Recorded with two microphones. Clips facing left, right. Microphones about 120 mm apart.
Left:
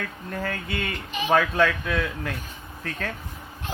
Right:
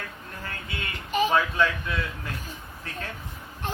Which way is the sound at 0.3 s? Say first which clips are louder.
Left 8 dB; 60° left (ahead or behind).